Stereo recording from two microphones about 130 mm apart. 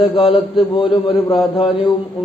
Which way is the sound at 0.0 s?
45° left (ahead or behind).